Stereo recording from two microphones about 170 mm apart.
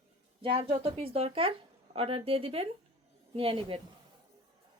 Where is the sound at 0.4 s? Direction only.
35° right (ahead or behind).